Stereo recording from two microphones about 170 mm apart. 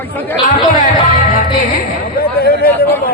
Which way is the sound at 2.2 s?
65° left (ahead or behind).